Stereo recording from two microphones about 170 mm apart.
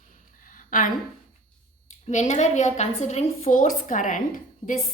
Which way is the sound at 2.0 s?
45° left (ahead or behind).